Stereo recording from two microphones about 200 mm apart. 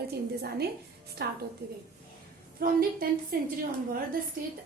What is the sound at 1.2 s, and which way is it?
Speech, 55° right (ahead or behind).